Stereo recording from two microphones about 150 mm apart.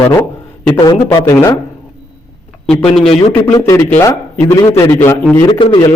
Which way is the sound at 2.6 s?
5° left (ahead or behind).